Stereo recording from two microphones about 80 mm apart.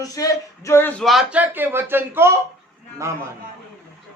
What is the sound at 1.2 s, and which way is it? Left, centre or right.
A man's voice, right.